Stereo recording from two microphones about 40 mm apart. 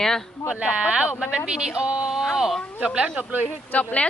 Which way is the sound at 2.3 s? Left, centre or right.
Centre.